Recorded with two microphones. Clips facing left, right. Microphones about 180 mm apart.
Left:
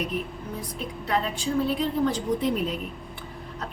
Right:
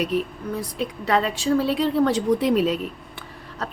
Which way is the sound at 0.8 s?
85° right.